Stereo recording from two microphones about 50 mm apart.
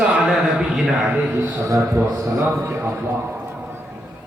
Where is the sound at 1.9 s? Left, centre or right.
Right.